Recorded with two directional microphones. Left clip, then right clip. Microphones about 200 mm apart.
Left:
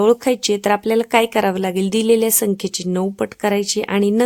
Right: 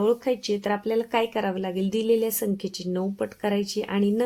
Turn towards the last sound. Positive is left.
turn(degrees=40)  # may be behind; listen again after turning